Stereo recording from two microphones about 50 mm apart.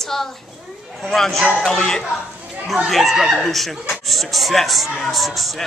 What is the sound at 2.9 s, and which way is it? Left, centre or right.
A woman's voice, centre.